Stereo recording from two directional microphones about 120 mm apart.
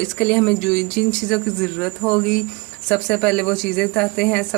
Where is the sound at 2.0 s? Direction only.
15° left (ahead or behind).